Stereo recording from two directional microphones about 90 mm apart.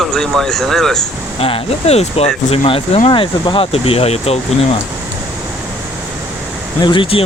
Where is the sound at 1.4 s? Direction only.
90° left.